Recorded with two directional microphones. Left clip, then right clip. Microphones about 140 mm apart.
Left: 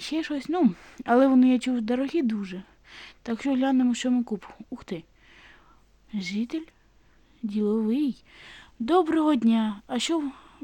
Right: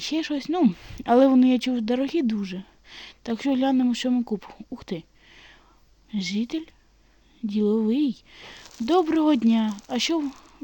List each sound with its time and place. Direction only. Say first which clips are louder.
0.0 s a woman's voice: right 3 dB; 30° right (ahead or behind)